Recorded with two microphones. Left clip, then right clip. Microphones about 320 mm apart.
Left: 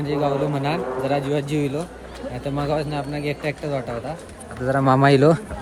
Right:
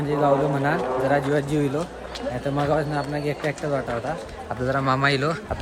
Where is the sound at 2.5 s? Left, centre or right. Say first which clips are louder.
Right 1 dB; centre.